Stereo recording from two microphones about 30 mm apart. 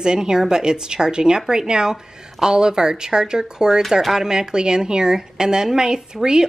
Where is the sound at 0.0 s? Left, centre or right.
Right.